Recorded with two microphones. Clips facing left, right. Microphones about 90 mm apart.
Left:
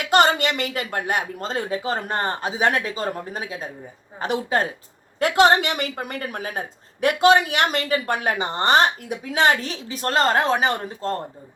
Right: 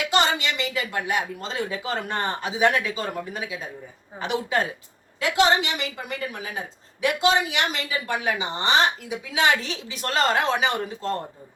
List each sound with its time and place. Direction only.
0.1 s speech: 50° left (ahead or behind)